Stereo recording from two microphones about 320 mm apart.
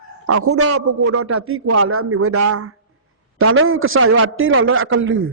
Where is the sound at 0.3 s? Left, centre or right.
Right.